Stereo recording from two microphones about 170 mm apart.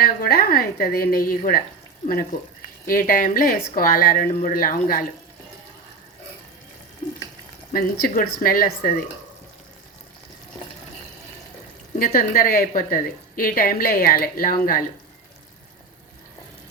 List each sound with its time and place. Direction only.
0.0 s a woman's voice: 65° left (ahead or behind)
2.8 s a woman's voice: 55° left (ahead or behind)
7.7 s a woman's voice: 60° left (ahead or behind)
11.9 s a woman's voice: 55° left (ahead or behind)